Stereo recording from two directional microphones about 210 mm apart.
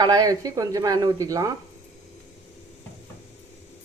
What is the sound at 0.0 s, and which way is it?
Speech, 20° right (ahead or behind).